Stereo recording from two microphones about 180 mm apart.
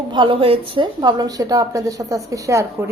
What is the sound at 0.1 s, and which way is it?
A woman's voice, 30° right (ahead or behind).